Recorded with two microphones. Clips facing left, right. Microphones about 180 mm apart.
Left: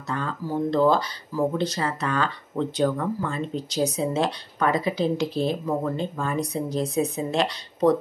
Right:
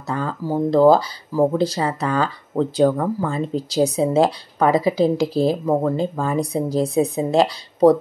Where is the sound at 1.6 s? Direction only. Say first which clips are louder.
Right 5 dB; 30° right (ahead or behind).